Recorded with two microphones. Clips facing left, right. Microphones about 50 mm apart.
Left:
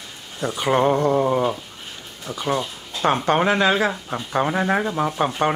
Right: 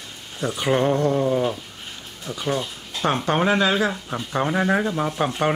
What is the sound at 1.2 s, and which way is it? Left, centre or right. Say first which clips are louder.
Speech: left 1 dB; left.